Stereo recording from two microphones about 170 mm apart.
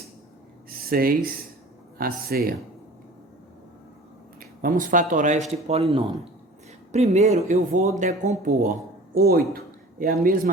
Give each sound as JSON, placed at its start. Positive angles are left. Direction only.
{"t": 0.7, "sound": "speech", "side_deg": -60}
{"t": 4.4, "sound": "speech", "side_deg": -55}
{"t": 5.6, "sound": "speech", "side_deg": -35}
{"t": 9.1, "sound": "speech", "side_deg": -60}